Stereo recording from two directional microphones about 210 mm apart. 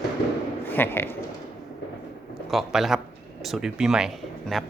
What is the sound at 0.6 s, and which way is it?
Speech, 10° left (ahead or behind).